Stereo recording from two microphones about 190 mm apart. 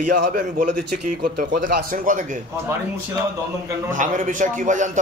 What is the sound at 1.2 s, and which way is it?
A man's voice, 50° right (ahead or behind).